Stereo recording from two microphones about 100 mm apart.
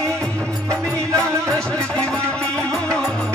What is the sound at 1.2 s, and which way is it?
Music, 10° left (ahead or behind).